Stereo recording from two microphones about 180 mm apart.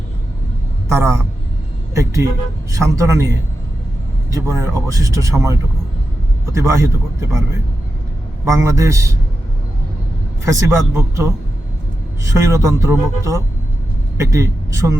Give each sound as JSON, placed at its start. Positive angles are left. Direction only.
{"t": 0.9, "sound": "speech", "side_deg": -15}
{"t": 2.7, "sound": "speech", "side_deg": -15}
{"t": 4.3, "sound": "speech", "side_deg": -15}
{"t": 8.4, "sound": "speech", "side_deg": -15}
{"t": 10.4, "sound": "a man's voice", "side_deg": -15}